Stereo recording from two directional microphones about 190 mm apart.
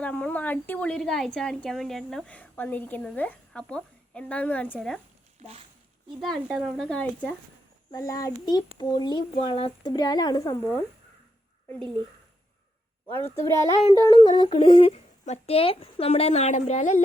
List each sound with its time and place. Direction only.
0.0 s a woman's voice: 5° left (ahead or behind)
5.4 s speech: 30° right (ahead or behind)
6.1 s speech: centre (ahead or behind)
7.9 s a child's voice: 20° left (ahead or behind)
13.1 s a woman's voice: 10° left (ahead or behind); by 17.0 s 35° left (ahead or behind)